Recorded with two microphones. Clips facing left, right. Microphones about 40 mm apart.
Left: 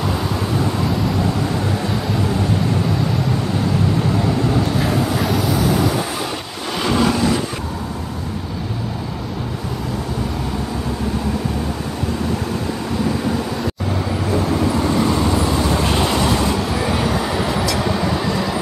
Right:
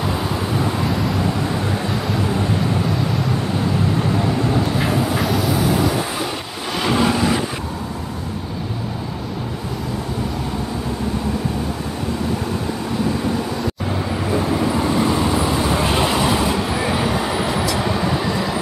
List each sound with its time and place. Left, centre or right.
0.0 s vehicle: centre
4.0 s vehicle: centre
14.2 s vehicle: centre